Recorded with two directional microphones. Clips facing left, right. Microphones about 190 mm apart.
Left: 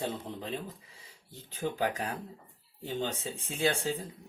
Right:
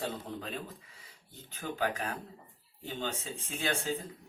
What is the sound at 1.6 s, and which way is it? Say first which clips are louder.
Speech: left 5 dB; 25° left (ahead or behind).